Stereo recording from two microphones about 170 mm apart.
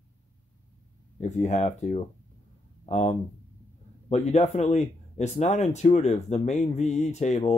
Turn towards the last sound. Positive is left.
turn(degrees=40)  # may be behind; listen again after turning